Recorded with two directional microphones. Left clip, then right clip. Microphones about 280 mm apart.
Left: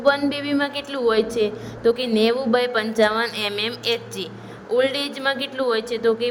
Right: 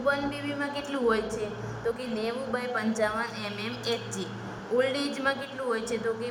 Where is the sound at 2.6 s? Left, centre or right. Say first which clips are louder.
Left 9 dB; left.